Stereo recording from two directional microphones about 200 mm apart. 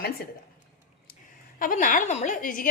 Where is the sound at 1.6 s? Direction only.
45° left (ahead or behind).